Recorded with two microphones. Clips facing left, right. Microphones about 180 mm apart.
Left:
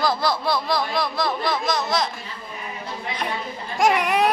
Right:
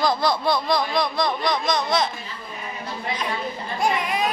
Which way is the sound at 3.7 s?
80° left.